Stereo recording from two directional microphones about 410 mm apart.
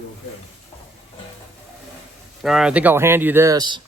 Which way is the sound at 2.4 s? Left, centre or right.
Centre.